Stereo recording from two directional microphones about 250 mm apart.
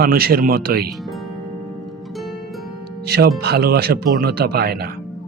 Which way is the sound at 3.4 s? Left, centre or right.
Right.